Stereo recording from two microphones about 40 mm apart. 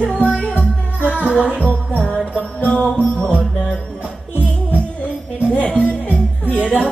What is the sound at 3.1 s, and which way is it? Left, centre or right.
Music, centre.